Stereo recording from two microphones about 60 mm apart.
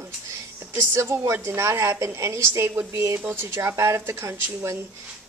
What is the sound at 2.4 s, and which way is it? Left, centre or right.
Speech, right.